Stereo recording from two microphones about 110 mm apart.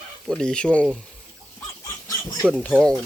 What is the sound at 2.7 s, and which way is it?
Speech, 10° left (ahead or behind).